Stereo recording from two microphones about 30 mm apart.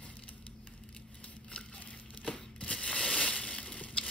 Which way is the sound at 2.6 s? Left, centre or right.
Left.